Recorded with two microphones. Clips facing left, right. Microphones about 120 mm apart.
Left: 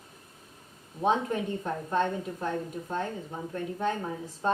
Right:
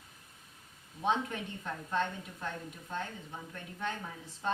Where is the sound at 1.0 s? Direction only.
40° left (ahead or behind).